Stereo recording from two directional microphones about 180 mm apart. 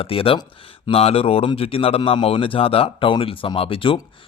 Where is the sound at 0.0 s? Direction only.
30° left (ahead or behind).